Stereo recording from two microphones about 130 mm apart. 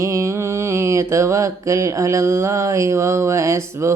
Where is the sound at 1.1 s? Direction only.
20° right (ahead or behind).